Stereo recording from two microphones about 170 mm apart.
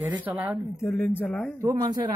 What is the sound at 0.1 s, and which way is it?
Speech, 10° right (ahead or behind).